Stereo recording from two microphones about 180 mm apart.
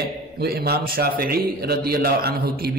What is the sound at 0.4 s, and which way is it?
A man's voice, 60° right (ahead or behind).